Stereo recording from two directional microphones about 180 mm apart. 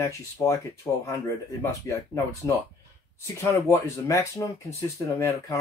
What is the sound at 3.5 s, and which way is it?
Speech, 15° left (ahead or behind).